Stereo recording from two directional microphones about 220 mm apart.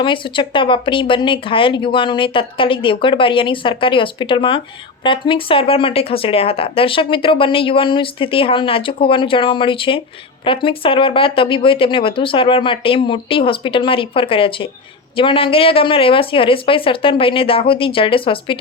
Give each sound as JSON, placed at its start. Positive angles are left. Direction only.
{"t": 0.0, "sound": "speech", "side_deg": 20}